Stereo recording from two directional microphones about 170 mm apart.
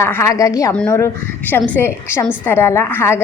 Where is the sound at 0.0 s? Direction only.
15° left (ahead or behind).